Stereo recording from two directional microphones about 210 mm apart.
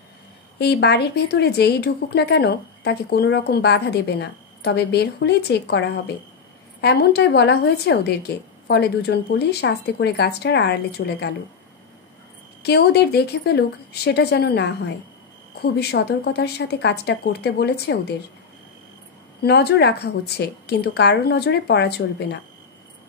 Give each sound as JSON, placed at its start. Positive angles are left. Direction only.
{"t": 0.6, "sound": "speech", "side_deg": 50}
{"t": 12.6, "sound": "speech", "side_deg": 50}
{"t": 19.4, "sound": "speech", "side_deg": 50}